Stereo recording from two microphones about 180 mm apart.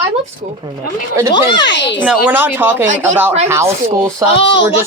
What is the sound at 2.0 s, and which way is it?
Speech, 10° right (ahead or behind).